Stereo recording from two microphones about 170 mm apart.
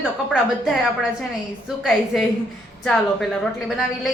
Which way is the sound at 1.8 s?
Centre (ahead or behind).